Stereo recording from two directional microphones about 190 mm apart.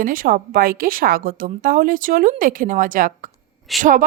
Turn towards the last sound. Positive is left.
turn(degrees=0)  # may be behind; listen again after turning